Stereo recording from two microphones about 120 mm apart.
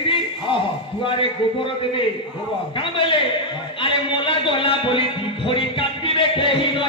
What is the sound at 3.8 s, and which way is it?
Music, 45° left (ahead or behind).